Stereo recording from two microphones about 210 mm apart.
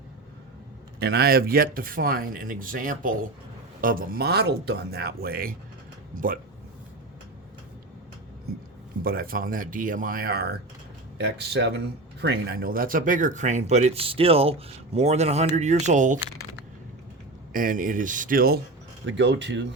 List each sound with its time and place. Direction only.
0.9 s speech: 50° right (ahead or behind)
9.0 s speech: 45° right (ahead or behind)
17.5 s speech: 40° right (ahead or behind)
19.0 s speech: 60° right (ahead or behind)